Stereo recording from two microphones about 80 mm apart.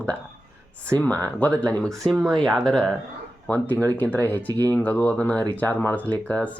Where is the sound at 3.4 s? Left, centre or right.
Left.